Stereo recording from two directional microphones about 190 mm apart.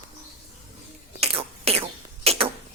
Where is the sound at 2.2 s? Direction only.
30° right (ahead or behind).